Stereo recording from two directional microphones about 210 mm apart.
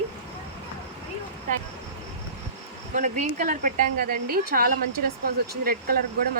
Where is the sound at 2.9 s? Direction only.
35° right (ahead or behind).